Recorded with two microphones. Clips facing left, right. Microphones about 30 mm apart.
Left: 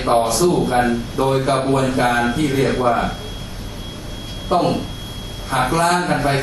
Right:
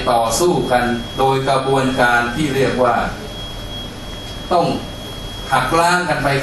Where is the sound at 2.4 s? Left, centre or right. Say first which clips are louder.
Right 2 dB; right.